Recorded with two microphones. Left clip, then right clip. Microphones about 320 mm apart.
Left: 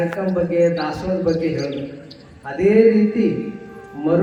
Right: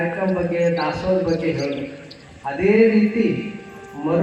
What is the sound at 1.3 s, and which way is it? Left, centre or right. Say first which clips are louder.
Speech: left 1 dB; centre.